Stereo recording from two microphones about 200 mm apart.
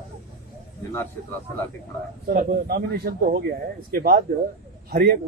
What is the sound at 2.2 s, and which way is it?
Speech, 45° right (ahead or behind).